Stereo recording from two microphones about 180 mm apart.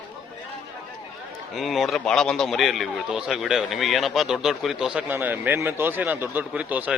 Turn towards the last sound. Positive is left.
turn(degrees=-10)  # may be behind; listen again after turning